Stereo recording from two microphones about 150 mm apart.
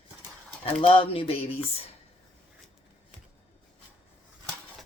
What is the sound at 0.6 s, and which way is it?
Speech, 40° left (ahead or behind).